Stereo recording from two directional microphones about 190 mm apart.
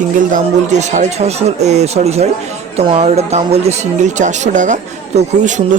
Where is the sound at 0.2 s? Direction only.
40° right (ahead or behind).